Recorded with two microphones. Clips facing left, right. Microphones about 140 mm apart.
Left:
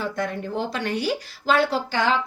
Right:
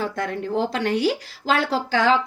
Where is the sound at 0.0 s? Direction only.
90° right.